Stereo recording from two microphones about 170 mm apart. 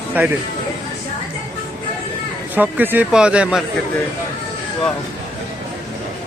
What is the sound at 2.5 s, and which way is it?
Speech, 10° right (ahead or behind).